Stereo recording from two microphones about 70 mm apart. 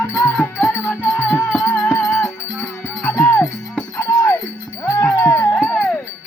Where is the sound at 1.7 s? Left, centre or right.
Left.